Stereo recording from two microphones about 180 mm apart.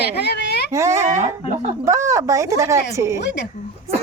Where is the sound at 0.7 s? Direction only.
15° right (ahead or behind).